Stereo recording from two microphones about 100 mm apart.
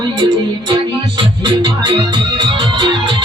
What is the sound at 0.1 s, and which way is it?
Music, 55° right (ahead or behind).